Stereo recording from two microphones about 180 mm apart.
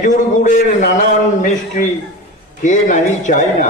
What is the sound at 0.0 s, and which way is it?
A man's voice, 45° left (ahead or behind).